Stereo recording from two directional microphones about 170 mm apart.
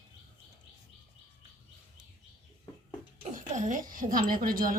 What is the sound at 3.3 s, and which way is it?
Music, 50° right (ahead or behind).